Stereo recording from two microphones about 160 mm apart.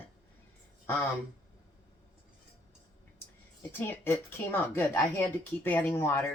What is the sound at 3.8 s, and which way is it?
Speech, 15° left (ahead or behind).